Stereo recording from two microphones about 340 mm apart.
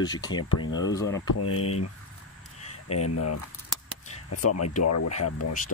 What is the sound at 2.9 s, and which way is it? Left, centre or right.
Speech, left.